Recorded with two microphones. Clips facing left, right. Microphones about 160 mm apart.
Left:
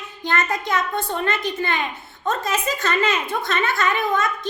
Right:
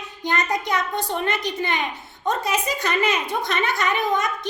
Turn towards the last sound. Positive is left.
turn(degrees=-15)  # may be behind; listen again after turning